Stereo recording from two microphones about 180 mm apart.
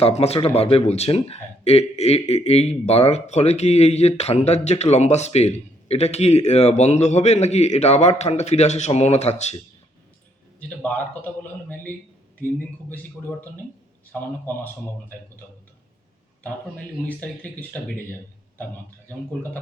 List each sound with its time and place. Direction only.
0.0 s speech: 35° left (ahead or behind)
10.8 s speech: 10° left (ahead or behind)
12.9 s speech: 10° left (ahead or behind)
17.1 s speech: 10° left (ahead or behind)